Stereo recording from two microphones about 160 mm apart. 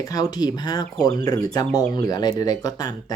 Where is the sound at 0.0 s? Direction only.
20° left (ahead or behind).